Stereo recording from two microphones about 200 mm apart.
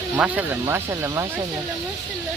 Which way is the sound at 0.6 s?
10° right (ahead or behind).